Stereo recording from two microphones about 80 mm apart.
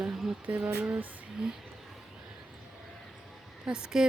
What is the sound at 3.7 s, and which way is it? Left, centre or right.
Speech, centre.